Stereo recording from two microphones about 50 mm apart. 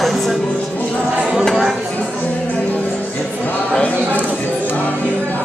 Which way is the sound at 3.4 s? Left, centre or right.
Left.